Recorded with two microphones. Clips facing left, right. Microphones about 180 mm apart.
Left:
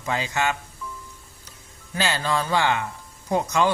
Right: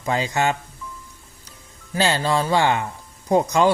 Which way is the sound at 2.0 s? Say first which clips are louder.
Right 4 dB; 35° right (ahead or behind).